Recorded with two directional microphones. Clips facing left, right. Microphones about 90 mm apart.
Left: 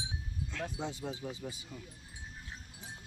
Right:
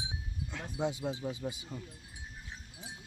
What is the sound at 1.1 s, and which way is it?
Speech, 20° right (ahead or behind).